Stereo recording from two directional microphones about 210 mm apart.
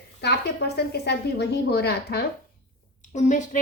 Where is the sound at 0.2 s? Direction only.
50° left (ahead or behind).